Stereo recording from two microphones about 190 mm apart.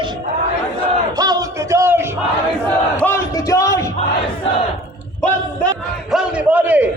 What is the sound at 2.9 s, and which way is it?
Crowd, 10° left (ahead or behind).